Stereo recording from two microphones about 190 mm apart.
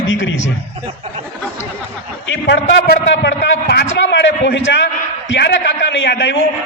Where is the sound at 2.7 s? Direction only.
55° left (ahead or behind).